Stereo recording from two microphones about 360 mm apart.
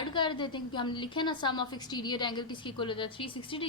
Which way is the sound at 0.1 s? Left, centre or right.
Centre.